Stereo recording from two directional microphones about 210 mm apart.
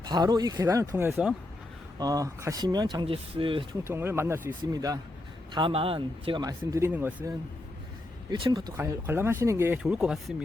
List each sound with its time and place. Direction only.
0.0 s speech: 20° right (ahead or behind)
3.8 s speech: 10° right (ahead or behind)
8.3 s speech: 20° right (ahead or behind); by 10.3 s 5° right (ahead or behind)